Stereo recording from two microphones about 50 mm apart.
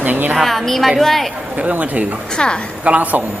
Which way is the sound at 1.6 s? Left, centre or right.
Right.